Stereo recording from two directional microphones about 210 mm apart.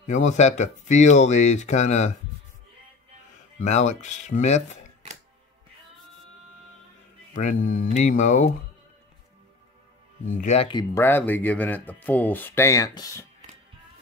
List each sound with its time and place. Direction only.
0.0 s speech: 35° left (ahead or behind)
3.5 s speech: 35° left (ahead or behind)
7.3 s speech: 40° left (ahead or behind)
10.3 s speech: 35° left (ahead or behind); by 13.3 s 15° left (ahead or behind)